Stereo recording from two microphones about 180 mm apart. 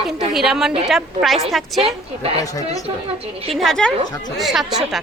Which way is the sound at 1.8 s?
35° right (ahead or behind).